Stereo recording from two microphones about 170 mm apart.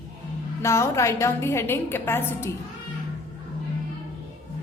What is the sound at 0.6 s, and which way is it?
A woman's voice, 15° left (ahead or behind).